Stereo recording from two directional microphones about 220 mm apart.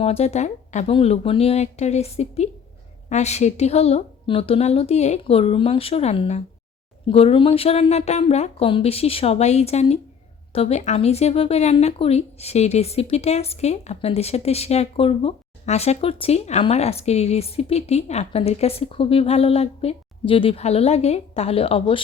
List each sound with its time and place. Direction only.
0.0 s speech: 30° left (ahead or behind)